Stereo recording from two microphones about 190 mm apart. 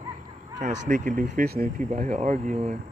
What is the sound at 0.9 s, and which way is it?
Speech, 40° right (ahead or behind).